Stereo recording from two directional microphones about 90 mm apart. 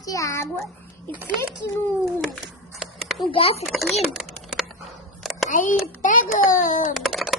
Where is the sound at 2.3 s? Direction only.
Centre (ahead or behind).